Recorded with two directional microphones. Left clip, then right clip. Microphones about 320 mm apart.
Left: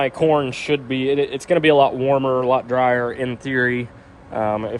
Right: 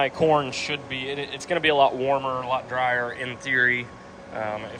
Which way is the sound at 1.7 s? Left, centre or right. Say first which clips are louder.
Left 3 dB; left.